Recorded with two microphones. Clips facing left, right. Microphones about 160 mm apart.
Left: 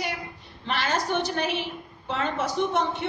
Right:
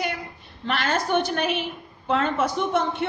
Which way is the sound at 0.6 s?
60° right (ahead or behind).